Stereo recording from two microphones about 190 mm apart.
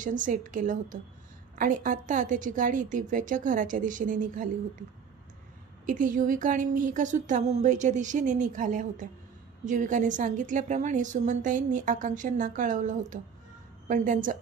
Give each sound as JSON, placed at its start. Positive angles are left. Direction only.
{"t": 0.0, "sound": "a woman's voice", "side_deg": -45}
{"t": 5.9, "sound": "a woman's voice", "side_deg": -45}